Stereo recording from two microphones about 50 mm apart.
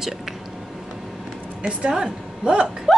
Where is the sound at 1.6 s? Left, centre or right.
Right.